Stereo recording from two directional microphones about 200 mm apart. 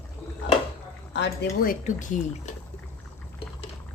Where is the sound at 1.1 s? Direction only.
60° left (ahead or behind); by 2.2 s 40° left (ahead or behind).